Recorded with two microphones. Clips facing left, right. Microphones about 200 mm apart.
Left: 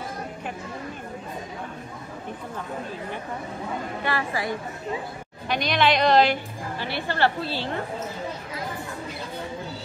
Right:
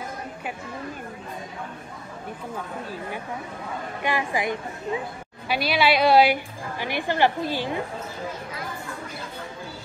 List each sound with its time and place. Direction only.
4.0 s a woman's voice: 15° right (ahead or behind)
5.5 s a woman's voice: 5° right (ahead or behind)